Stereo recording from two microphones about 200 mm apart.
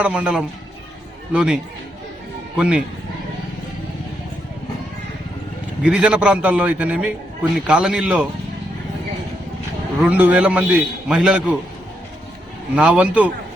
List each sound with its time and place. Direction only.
0.0 s a man's voice: 5° right (ahead or behind)
5.8 s a man's voice: 5° right (ahead or behind)
10.0 s a man's voice: 10° right (ahead or behind)
12.7 s a man's voice: 5° right (ahead or behind)